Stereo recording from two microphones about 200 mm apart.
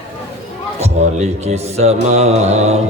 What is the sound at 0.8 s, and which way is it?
A man's voice, 35° right (ahead or behind).